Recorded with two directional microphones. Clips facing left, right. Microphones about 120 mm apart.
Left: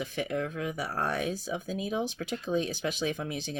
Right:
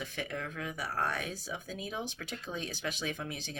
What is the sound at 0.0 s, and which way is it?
Speech, 20° left (ahead or behind).